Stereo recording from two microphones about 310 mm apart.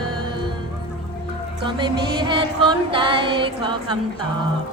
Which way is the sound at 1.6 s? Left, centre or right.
Centre.